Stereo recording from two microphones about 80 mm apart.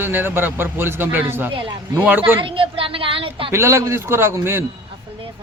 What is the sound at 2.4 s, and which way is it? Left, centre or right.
A woman's voice, right.